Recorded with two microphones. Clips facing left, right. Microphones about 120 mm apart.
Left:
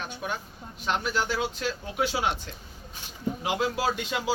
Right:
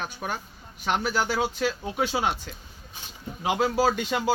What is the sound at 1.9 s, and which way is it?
Speech, 30° right (ahead or behind).